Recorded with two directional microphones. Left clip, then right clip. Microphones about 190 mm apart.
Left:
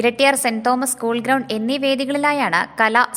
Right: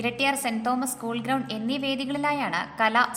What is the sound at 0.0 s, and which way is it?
A woman's voice, 40° left (ahead or behind).